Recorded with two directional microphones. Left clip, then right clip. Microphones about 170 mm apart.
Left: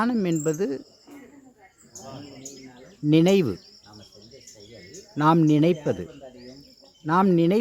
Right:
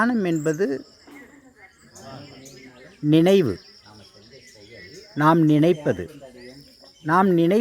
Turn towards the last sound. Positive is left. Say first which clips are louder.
# right 2 dB
turn(degrees=0)  # may be behind; listen again after turning